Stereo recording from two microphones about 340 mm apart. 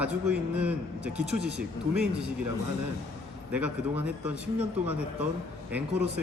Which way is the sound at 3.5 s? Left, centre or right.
Centre.